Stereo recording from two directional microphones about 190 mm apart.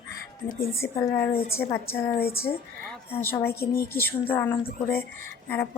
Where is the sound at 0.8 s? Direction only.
10° left (ahead or behind).